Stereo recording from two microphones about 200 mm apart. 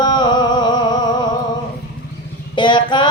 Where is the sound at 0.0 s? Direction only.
20° left (ahead or behind).